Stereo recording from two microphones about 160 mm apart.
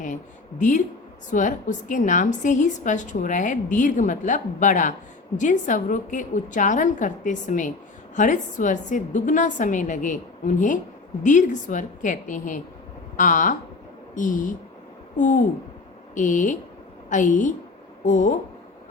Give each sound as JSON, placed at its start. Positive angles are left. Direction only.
{"t": 1.3, "sound": "a woman's voice", "side_deg": 55}